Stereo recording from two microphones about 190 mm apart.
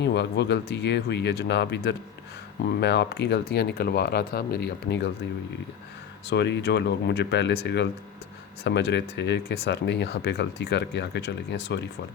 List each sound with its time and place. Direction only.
0.0 s speech: 65° left (ahead or behind)
6.3 s speech: 65° left (ahead or behind)